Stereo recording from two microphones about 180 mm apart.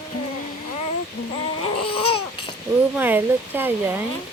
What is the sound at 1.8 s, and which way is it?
Babbling, 30° left (ahead or behind).